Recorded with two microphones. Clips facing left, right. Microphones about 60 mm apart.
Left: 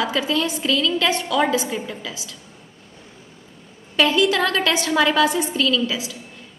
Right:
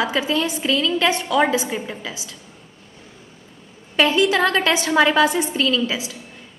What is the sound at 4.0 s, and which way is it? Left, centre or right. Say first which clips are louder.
A woman's voice: right 1 dB; right.